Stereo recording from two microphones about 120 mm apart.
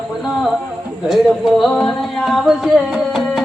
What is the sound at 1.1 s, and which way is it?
Music, centre (ahead or behind).